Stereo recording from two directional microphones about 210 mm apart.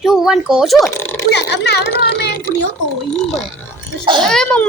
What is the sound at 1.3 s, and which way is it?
A child's voice, 55° left (ahead or behind).